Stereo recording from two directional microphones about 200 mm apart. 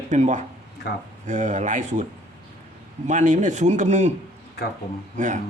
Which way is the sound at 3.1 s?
40° right (ahead or behind).